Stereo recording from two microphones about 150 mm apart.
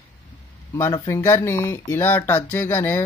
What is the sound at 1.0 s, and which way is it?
Speech, 20° left (ahead or behind).